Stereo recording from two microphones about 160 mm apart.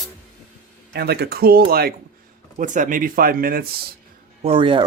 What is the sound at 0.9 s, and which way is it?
Speech, 85° right.